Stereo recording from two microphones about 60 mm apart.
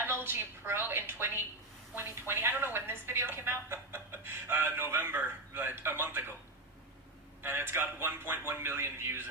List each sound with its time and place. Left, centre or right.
0.0 s a woman's voice: right
7.4 s a woman's voice: right